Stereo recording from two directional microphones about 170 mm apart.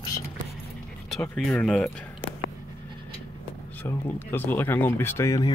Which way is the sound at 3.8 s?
10° left (ahead or behind).